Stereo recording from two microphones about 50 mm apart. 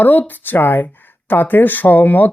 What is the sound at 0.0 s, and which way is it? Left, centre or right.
Speech, left.